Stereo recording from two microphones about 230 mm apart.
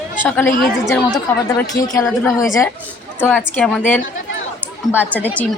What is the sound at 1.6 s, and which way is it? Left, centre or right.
Speech, centre.